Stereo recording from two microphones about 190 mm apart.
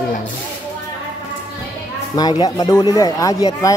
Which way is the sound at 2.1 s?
20° left (ahead or behind).